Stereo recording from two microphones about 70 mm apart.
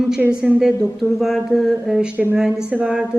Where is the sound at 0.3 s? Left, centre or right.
Centre.